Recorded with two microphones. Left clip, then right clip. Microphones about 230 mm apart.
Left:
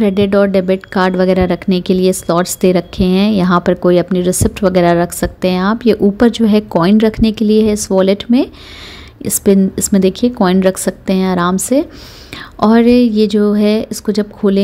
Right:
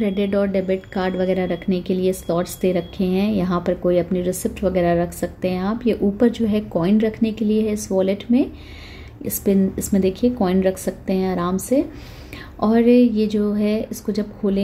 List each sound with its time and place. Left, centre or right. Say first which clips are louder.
0.0 s a woman's voice: left 9 dB; left